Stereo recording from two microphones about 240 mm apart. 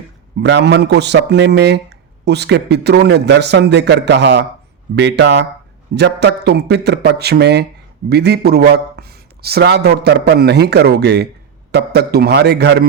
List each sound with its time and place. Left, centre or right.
0.4 s speech: right